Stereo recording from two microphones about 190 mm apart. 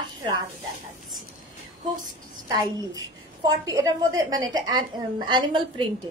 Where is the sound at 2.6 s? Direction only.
20° right (ahead or behind).